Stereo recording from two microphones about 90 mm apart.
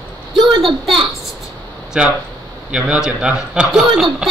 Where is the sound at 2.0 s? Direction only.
10° right (ahead or behind).